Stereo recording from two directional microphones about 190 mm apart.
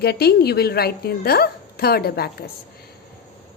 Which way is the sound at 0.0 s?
55° left (ahead or behind).